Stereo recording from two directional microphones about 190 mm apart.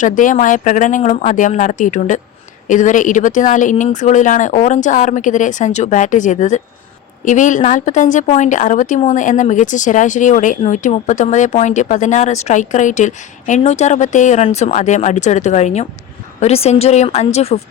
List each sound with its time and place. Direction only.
0.0 s speech: 45° left (ahead or behind)